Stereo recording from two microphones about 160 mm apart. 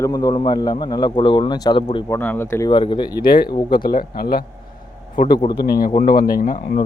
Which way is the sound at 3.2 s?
70° left (ahead or behind).